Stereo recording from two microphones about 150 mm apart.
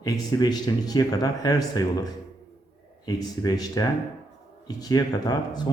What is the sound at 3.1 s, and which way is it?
Speech, 25° left (ahead or behind).